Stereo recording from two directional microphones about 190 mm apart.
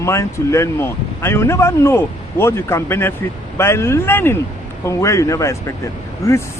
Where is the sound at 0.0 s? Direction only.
15° left (ahead or behind).